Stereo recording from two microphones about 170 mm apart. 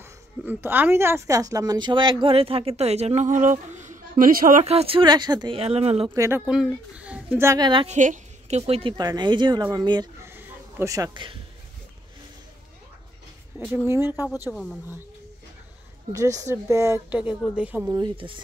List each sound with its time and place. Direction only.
0.0 s a woman's voice: 10° right (ahead or behind)
5.6 s a woman's voice: 35° right (ahead or behind)
6.1 s speech: 15° right (ahead or behind)
6.4 s speech: 5° right (ahead or behind); by 7.9 s 25° right (ahead or behind)
7.9 s a woman's voice: 45° right (ahead or behind); by 10.0 s 25° right (ahead or behind)
10.2 s a sound: 15° right (ahead or behind)
13.8 s speech: 15° right (ahead or behind)
14.5 s speech: centre (ahead or behind)
16.1 s speech: 20° right (ahead or behind)
17.1 s speech: 10° right (ahead or behind)
17.9 s a woman's voice: 30° right (ahead or behind)